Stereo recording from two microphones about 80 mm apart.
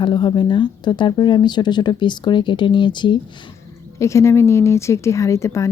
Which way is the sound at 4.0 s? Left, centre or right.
Left.